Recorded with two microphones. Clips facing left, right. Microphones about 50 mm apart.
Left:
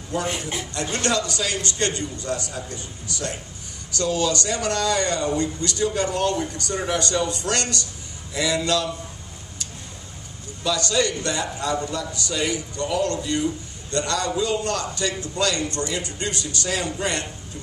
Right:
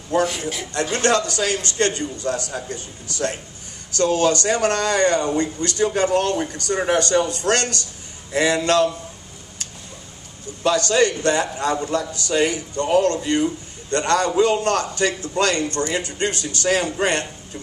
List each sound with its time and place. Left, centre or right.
0.1 s a man's voice: right
0.8 s speech: right
10.9 s speech: right